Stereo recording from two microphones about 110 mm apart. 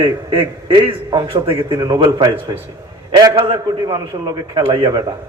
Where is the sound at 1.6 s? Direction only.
35° right (ahead or behind).